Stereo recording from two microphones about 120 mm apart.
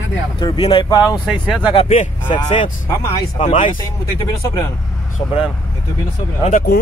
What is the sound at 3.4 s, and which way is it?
Speech, 70° left (ahead or behind).